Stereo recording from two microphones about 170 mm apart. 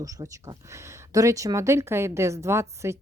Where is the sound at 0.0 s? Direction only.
20° right (ahead or behind).